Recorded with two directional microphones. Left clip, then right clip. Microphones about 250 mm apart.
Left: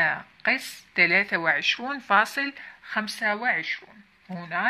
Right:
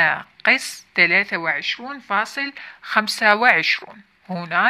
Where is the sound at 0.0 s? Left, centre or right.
Centre.